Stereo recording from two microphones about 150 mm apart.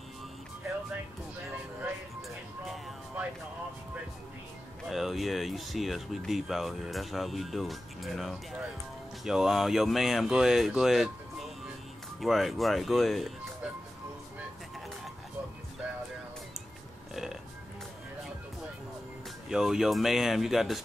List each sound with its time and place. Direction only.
1.8 s music: centre (ahead or behind)
4.8 s speech: centre (ahead or behind)
17.1 s burping: 5° right (ahead or behind)
19.5 s speech: 5° right (ahead or behind)